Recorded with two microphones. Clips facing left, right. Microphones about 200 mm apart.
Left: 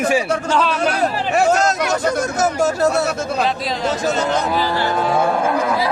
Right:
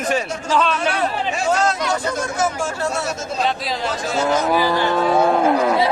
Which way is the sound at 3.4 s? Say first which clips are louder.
Even; centre (ahead or behind).